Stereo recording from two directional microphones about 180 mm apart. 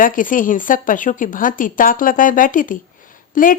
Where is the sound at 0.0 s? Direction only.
50° left (ahead or behind).